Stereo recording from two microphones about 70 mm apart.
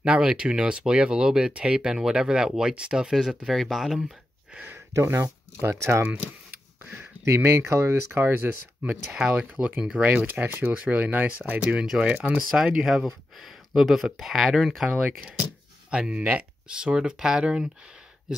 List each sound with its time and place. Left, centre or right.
0.0 s speech: centre
4.7 s speech: right
6.9 s speech: right
9.1 s speech: centre
11.8 s speech: centre
15.0 s speech: right